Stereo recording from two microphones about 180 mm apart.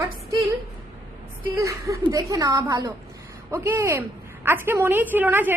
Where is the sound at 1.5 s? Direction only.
15° right (ahead or behind).